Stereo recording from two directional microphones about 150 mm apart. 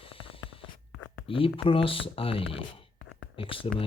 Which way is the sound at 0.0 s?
35° left (ahead or behind).